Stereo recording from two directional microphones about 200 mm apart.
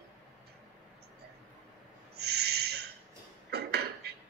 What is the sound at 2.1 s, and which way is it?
Owl, 55° right (ahead or behind).